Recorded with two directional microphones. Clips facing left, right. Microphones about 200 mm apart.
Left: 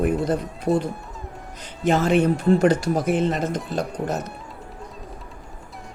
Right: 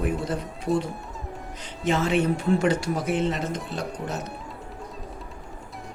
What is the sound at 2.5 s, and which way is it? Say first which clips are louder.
Speech: left 5 dB; 40° left (ahead or behind).